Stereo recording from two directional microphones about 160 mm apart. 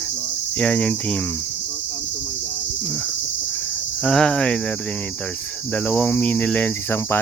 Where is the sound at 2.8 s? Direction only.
5° left (ahead or behind).